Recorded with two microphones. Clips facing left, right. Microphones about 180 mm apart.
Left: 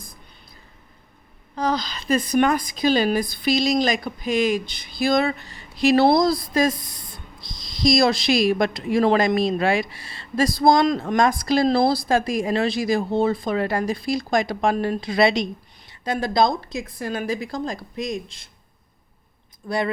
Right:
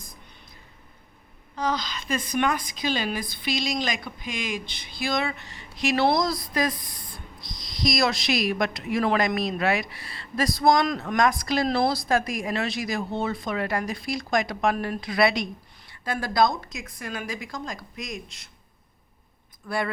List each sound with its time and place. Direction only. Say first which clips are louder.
1.5 s a woman's voice: left 4 dB; 35° left (ahead or behind)
19.6 s speech: left 4 dB; 20° left (ahead or behind)